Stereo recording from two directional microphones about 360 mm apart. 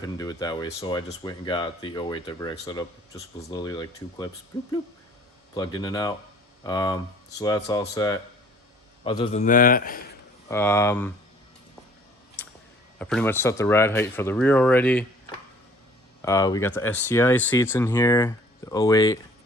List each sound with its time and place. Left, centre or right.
0.0 s a man's voice: centre
10.5 s speech: centre
12.4 s a sound: centre
13.0 s speech: centre
16.2 s speech: centre